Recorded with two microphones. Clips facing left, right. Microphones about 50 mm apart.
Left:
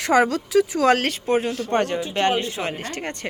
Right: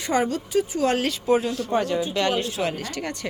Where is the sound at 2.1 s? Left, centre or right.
Left.